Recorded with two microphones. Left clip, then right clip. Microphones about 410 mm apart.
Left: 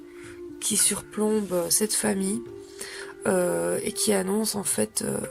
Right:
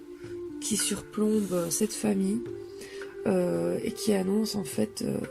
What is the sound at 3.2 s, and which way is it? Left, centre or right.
Speech, left.